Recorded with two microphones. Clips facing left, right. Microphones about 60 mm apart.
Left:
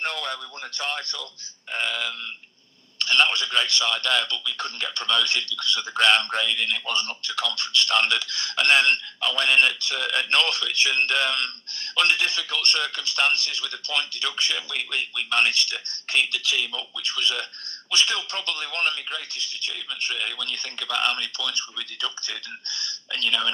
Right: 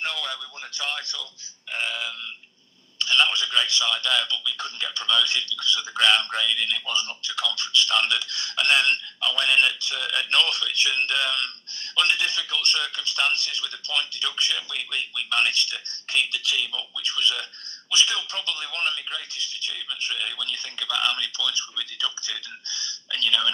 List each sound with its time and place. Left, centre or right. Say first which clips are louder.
0.0 s a man's voice: left 1 dB; left
6.8 s a man's voice: left 1 dB; left
20.4 s a man's voice: even; left
23.1 s a man's voice: right 1 dB; left